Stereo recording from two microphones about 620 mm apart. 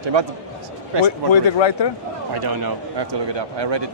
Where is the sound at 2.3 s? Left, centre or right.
Right.